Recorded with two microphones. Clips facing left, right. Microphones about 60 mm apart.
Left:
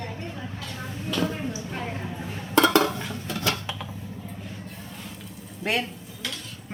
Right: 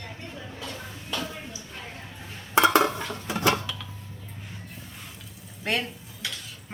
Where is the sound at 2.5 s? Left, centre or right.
Centre.